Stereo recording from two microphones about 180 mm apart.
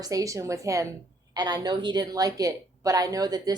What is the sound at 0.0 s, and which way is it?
A woman's voice, 20° right (ahead or behind).